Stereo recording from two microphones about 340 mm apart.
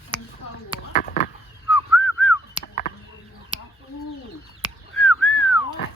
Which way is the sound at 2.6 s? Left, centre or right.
Left.